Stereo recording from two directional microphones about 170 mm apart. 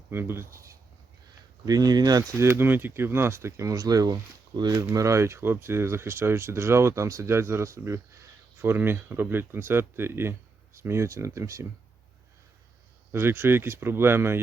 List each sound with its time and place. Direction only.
0.1 s speech: 15° right (ahead or behind)
13.1 s speech: 15° right (ahead or behind)